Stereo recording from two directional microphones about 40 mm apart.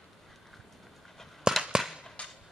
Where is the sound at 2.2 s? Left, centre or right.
Left.